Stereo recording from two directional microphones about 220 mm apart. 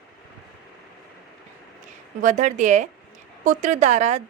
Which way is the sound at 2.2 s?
35° right (ahead or behind).